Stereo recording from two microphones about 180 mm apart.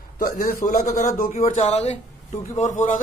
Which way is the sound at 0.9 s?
45° left (ahead or behind).